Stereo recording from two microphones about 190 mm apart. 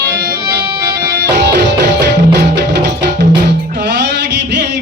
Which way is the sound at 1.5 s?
60° right (ahead or behind).